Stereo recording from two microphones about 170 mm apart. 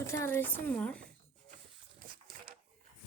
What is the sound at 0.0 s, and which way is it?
Speech, 15° left (ahead or behind).